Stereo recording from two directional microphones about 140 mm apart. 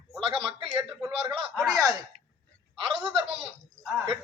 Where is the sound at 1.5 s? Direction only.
Centre (ahead or behind).